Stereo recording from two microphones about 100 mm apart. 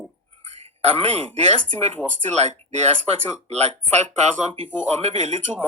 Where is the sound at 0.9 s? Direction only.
75° right (ahead or behind).